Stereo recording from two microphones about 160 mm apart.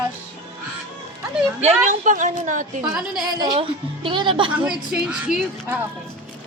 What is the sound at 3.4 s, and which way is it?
A woman's voice, 30° right (ahead or behind).